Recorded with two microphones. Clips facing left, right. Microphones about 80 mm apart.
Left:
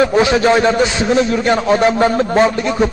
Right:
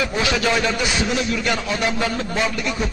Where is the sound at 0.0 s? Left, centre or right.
Left.